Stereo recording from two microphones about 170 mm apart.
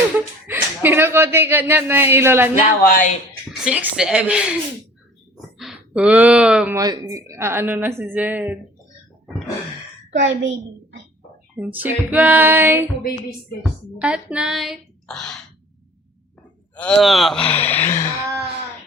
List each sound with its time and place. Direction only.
0.4 s a woman's voice: 10° right (ahead or behind)
2.6 s speech: 55° left (ahead or behind)
3.5 s a sound: 5° right (ahead or behind)
5.5 s speech: 5° right (ahead or behind)
6.7 s a woman's voice: 25° right (ahead or behind)
10.1 s a woman's voice: 90° right
11.5 s a woman's voice: 10° right (ahead or behind)
13.6 s a sound: 5° right (ahead or behind)
16.7 s speech: 5° left (ahead or behind)